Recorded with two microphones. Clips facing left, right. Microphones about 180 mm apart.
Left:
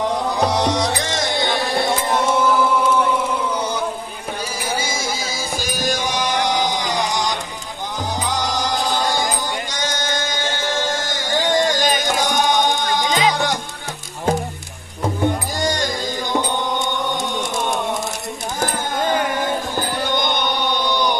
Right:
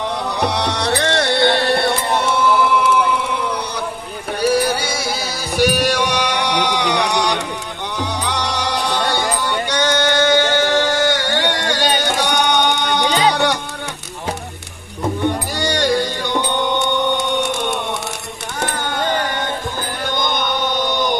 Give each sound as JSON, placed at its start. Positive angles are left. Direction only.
{"t": 0.4, "sound": "music", "side_deg": -65}
{"t": 4.4, "sound": "music", "side_deg": -70}
{"t": 15.5, "sound": "music", "side_deg": -70}
{"t": 18.6, "sound": "a sound", "side_deg": -65}